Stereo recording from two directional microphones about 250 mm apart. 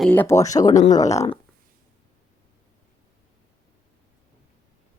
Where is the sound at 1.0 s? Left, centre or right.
Left.